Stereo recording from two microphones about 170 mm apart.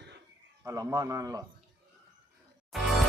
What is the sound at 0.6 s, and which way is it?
Speech, 20° right (ahead or behind).